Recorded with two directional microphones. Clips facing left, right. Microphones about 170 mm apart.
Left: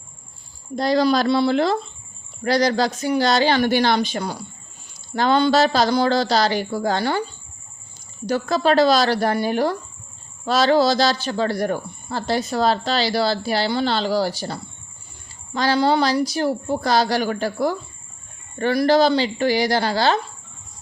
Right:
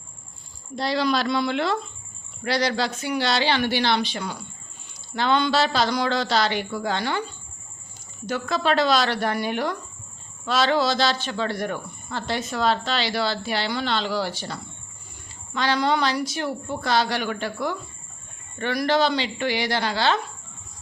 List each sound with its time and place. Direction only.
0.8 s a man's voice: 45° left (ahead or behind)
8.3 s a man's voice: 40° left (ahead or behind)